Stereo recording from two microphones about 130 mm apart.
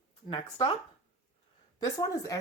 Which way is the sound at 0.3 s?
45° left (ahead or behind).